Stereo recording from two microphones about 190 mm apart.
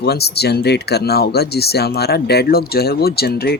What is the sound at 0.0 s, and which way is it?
Speech, 60° left (ahead or behind).